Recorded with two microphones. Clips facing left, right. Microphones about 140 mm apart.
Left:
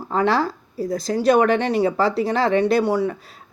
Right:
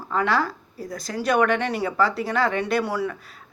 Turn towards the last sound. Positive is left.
turn(degrees=30)  # may be behind; listen again after turning